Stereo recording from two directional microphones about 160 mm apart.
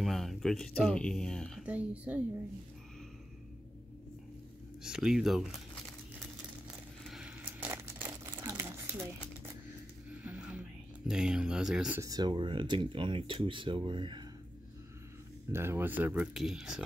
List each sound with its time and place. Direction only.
0.0 s speech: centre (ahead or behind)
1.7 s speech: 10° right (ahead or behind)
4.8 s speech: 5° right (ahead or behind)
6.7 s crumpling: 5° right (ahead or behind)
10.1 s music: 10° right (ahead or behind)
11.1 s speech: 5° right (ahead or behind)
12.0 s speech: 25° right (ahead or behind)
15.5 s speech: 15° right (ahead or behind)